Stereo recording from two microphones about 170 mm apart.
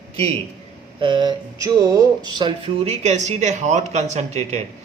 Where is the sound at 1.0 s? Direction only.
25° right (ahead or behind).